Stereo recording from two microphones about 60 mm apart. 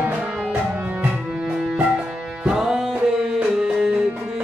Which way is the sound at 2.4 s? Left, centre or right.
Centre.